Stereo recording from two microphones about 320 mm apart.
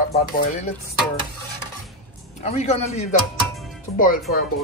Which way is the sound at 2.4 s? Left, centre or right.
Centre.